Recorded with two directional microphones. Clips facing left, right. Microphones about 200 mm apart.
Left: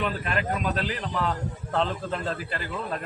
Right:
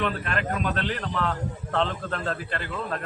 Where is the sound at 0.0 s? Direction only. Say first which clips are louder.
Even; 5° left (ahead or behind).